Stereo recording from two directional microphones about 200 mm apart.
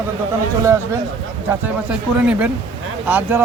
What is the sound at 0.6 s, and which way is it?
Speech, 15° right (ahead or behind).